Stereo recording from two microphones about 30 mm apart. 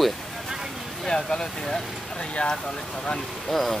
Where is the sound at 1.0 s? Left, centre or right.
Left.